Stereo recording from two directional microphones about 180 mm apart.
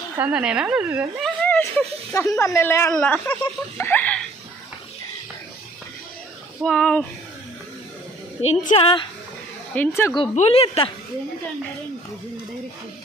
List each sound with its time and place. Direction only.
0.2 s speech: 5° right (ahead or behind)
1.4 s speech: 10° left (ahead or behind)
6.6 s speech: 5° left (ahead or behind)
8.4 s speech: 35° left (ahead or behind)
9.8 s speech: 15° left (ahead or behind)
10.3 s speech: 35° left (ahead or behind)